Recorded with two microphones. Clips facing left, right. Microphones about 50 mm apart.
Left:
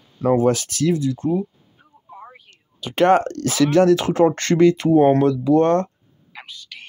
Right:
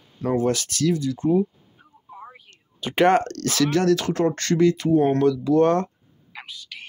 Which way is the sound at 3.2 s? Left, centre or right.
Centre.